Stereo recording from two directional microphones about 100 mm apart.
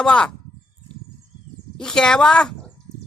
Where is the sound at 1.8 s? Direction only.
5° left (ahead or behind).